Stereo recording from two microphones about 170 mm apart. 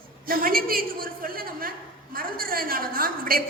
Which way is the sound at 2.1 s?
60° right (ahead or behind).